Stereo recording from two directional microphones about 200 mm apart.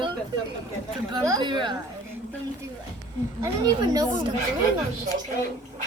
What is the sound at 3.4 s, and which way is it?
Speech, 20° right (ahead or behind).